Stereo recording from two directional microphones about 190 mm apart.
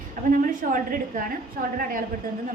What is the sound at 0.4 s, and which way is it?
A woman's voice, 45° right (ahead or behind).